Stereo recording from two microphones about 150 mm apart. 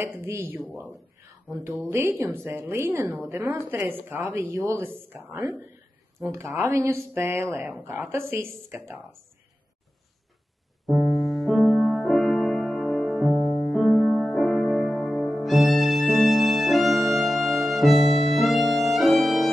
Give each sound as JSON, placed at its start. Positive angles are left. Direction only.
{"t": 0.2, "sound": "speech", "side_deg": -15}
{"t": 10.9, "sound": "music", "side_deg": 0}